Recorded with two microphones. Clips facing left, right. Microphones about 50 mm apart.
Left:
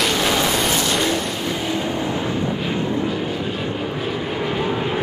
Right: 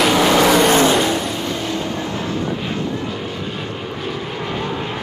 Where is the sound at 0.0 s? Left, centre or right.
Centre.